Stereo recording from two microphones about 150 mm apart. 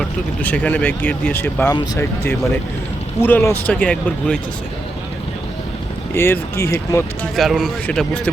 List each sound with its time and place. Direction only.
0.4 s speech: 10° left (ahead or behind)
6.1 s speech: 15° left (ahead or behind)
7.3 s a man's voice: centre (ahead or behind)